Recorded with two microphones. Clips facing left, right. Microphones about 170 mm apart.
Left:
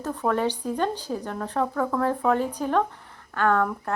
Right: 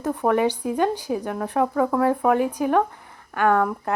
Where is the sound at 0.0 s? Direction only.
15° right (ahead or behind).